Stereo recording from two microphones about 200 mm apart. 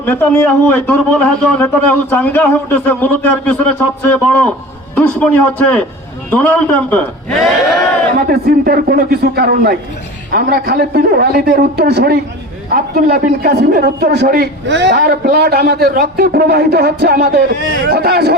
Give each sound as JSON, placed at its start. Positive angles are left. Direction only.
{"t": 0.0, "sound": "a man's voice", "side_deg": 10}
{"t": 8.3, "sound": "a man's voice", "side_deg": -50}